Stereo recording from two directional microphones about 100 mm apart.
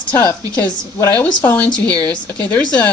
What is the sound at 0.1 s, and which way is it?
A woman's voice, 20° left (ahead or behind).